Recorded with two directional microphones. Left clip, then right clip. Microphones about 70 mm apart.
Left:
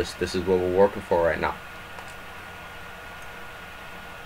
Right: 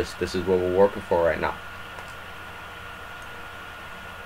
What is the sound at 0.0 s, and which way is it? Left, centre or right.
Speech, centre.